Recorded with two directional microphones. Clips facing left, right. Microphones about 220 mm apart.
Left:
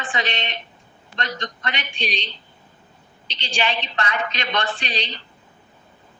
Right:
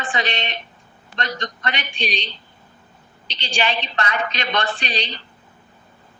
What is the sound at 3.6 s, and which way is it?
Speech, 40° right (ahead or behind).